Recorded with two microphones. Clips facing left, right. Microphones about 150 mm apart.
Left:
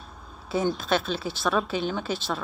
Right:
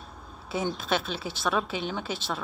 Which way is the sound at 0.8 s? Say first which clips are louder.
Left 3 dB; 15° right (ahead or behind).